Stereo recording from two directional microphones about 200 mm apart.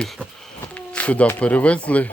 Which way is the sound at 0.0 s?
Centre (ahead or behind).